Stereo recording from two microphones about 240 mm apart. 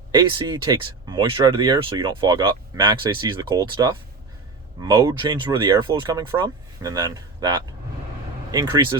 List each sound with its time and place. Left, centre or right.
0.1 s speech: centre